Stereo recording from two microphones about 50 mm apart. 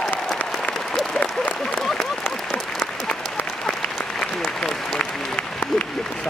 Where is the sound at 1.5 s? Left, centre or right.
Centre.